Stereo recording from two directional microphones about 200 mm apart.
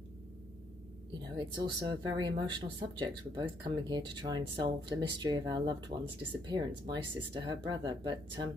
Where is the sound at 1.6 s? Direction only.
20° right (ahead or behind).